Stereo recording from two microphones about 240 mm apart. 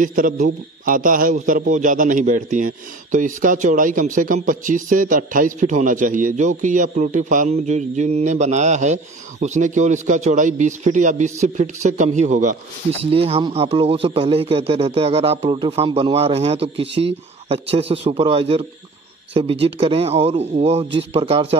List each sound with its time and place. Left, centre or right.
0.0 s a man's voice: right